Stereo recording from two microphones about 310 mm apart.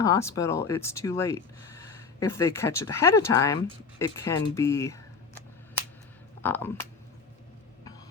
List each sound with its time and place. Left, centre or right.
0.0 s speech: centre
6.4 s speech: centre